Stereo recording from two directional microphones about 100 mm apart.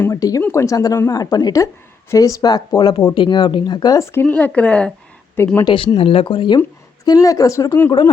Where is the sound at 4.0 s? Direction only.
20° left (ahead or behind).